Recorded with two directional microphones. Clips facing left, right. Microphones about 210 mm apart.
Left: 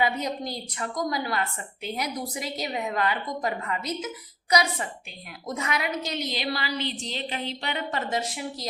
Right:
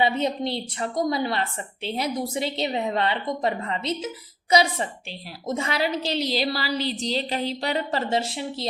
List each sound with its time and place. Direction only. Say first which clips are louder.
0.0 s a woman's voice: right 4 dB; 25° right (ahead or behind)